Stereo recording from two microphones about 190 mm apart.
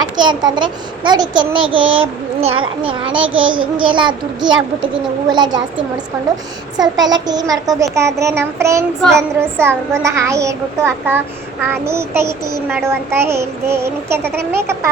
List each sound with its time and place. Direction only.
0.2 s a child's voice: 25° right (ahead or behind)
1.8 s a sound: 90° right
2.4 s a child's voice: 30° right (ahead or behind)
3.2 s a sound: 90° right
3.8 s a child's voice: 25° right (ahead or behind)
6.7 s child singing: 20° right (ahead or behind)